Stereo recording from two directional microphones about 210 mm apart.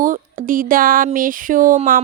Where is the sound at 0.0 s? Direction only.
40° right (ahead or behind).